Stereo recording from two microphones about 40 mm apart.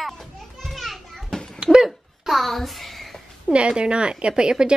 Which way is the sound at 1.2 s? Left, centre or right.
Centre.